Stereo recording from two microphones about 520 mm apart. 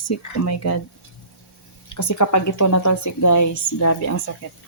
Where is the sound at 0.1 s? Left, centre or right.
Left.